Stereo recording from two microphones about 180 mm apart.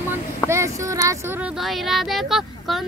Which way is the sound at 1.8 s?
Centre (ahead or behind).